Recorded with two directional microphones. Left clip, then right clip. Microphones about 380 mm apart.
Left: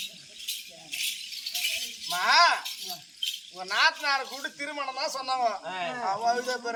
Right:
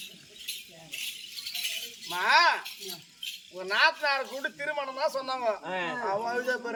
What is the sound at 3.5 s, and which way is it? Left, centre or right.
Speech, centre.